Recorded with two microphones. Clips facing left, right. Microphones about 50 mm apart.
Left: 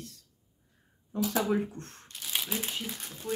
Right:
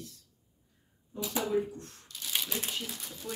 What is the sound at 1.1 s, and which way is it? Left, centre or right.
Speech, left.